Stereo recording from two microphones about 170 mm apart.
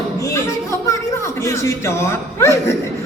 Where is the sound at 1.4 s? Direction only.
15° left (ahead or behind).